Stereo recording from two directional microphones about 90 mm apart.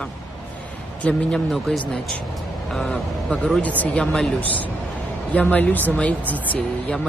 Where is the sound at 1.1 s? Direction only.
5° left (ahead or behind).